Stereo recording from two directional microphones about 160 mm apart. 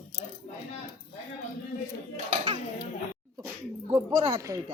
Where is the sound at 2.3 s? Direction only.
45° right (ahead or behind).